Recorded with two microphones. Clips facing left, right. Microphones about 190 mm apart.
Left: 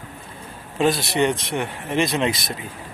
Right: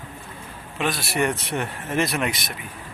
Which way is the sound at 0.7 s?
30° left (ahead or behind).